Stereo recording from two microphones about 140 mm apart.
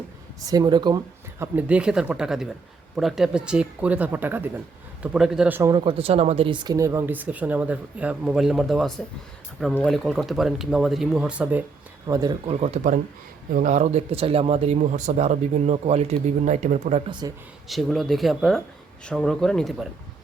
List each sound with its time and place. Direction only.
0.4 s speech: 30° right (ahead or behind)
1.4 s a man's voice: 10° right (ahead or behind)
5.7 s speech: 40° right (ahead or behind)
6.7 s a man's voice: 20° right (ahead or behind)
12.0 s speech: 25° right (ahead or behind)
12.5 s speech: 50° right (ahead or behind)
17.1 s speech: 30° right (ahead or behind)
17.7 s speech: centre (ahead or behind)